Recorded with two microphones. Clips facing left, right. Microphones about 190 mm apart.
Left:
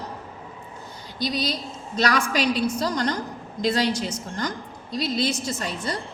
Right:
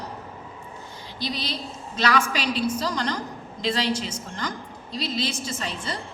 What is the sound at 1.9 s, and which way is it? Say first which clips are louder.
A woman's voice: left 1 dB; 40° left (ahead or behind).